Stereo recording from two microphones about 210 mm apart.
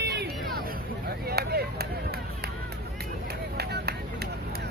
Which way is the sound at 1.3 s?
50° right (ahead or behind).